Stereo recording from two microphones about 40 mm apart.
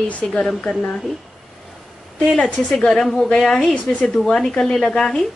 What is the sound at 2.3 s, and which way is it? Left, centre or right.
Speech, left.